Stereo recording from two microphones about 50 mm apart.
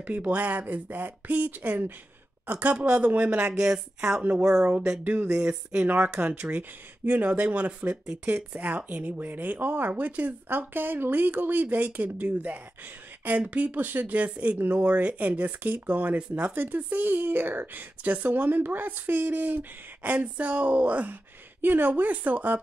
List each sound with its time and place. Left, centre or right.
0.0 s speech: right
2.7 s speech: right
4.2 s speech: right
16.5 s speech: right
21.5 s speech: right